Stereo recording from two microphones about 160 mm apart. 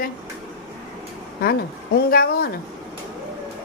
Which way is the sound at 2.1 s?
70° left (ahead or behind).